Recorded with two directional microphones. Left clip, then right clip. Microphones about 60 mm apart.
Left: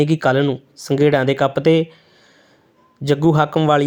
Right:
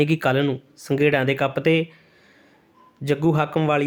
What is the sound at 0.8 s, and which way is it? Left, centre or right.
Speech, left.